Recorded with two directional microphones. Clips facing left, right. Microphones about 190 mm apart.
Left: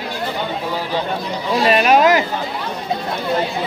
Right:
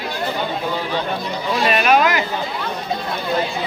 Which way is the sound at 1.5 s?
35° left (ahead or behind).